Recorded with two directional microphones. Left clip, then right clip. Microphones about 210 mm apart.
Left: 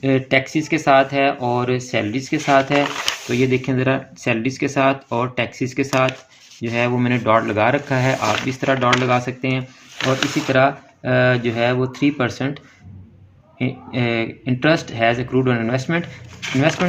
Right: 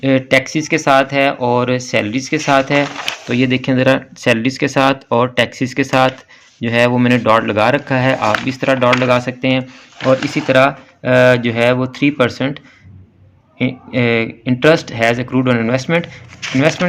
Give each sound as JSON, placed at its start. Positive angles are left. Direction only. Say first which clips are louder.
{"t": 0.0, "sound": "speech", "louder": "right 5 dB", "side_deg": -25}